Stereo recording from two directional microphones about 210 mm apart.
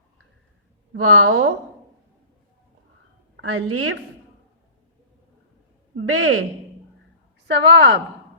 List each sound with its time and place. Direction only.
0.9 s a woman's voice: 80° right
3.3 s a woman's voice: 75° right (ahead or behind)
6.1 s speech: 75° right (ahead or behind)
7.4 s a woman's voice: 55° right (ahead or behind)